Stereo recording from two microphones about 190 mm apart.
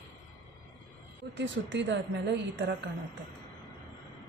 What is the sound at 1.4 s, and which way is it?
A woman's voice, 70° right (ahead or behind).